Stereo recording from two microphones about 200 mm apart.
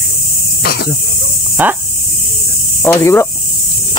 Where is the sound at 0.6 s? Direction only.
50° left (ahead or behind).